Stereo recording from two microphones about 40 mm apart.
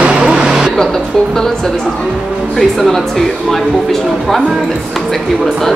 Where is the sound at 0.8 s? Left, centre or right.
Centre.